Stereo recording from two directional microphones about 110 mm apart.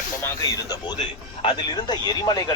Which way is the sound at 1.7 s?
40° left (ahead or behind).